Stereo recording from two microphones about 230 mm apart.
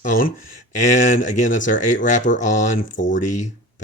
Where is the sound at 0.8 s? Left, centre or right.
Left.